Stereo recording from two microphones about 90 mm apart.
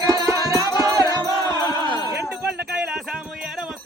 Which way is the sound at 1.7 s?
45° left (ahead or behind).